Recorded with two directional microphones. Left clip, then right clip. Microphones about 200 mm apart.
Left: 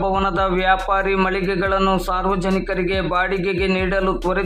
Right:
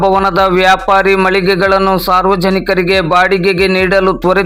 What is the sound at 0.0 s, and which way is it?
A man's voice, 30° right (ahead or behind).